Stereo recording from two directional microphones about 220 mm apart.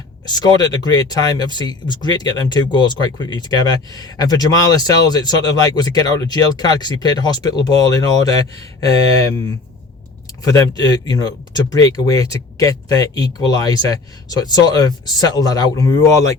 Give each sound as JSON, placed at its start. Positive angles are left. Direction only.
{"t": 0.3, "sound": "speech", "side_deg": 15}